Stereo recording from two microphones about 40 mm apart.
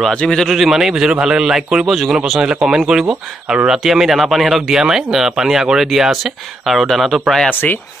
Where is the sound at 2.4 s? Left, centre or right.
Centre.